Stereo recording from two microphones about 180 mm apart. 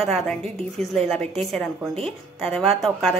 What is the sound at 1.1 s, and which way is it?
A woman's voice, 5° left (ahead or behind).